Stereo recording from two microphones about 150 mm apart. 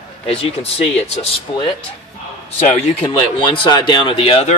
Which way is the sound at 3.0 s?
35° left (ahead or behind).